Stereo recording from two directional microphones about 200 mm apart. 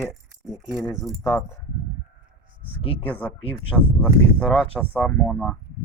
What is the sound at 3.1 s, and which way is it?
Speech, 5° left (ahead or behind).